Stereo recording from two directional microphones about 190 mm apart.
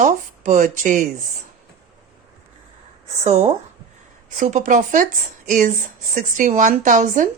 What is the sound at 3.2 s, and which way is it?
Speech, 35° right (ahead or behind).